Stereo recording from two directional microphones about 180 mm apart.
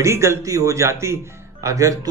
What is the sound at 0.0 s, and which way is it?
Speech, 15° right (ahead or behind).